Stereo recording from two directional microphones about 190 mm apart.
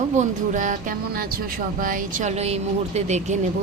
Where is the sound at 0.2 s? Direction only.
40° right (ahead or behind).